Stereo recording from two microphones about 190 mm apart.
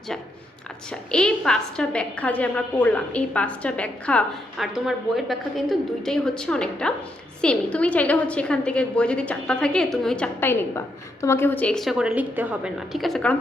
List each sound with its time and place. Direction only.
0.9 s a woman's voice: 5° left (ahead or behind)